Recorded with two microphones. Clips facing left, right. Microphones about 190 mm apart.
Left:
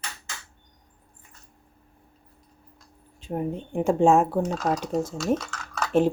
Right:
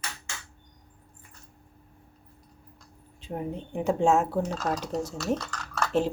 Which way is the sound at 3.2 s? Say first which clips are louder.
Left 4 dB; 50° left (ahead or behind).